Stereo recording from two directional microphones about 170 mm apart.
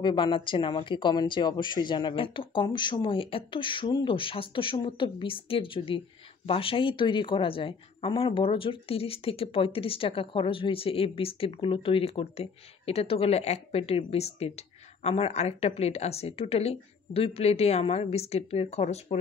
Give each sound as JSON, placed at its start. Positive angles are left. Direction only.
{"t": 0.0, "sound": "a woman's voice", "side_deg": 30}